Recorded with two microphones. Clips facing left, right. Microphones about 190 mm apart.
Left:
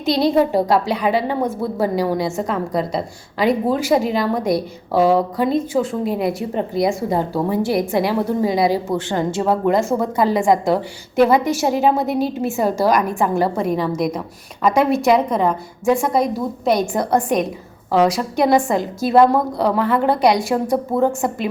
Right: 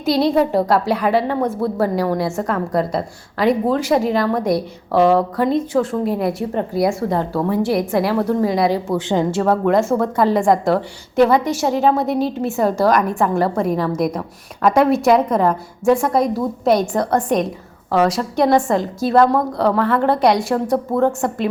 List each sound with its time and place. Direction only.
0.0 s a woman's voice: 5° right (ahead or behind)
9.0 s a woman's voice: 15° right (ahead or behind)
9.3 s a woman's voice: 5° left (ahead or behind)
16.9 s a woman's voice: 20° left (ahead or behind)
17.2 s a woman's voice: centre (ahead or behind)
17.9 s a woman's voice: 10° left (ahead or behind)
18.7 s a woman's voice: centre (ahead or behind)